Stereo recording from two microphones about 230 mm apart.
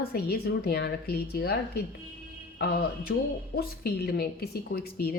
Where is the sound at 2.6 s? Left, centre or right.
Left.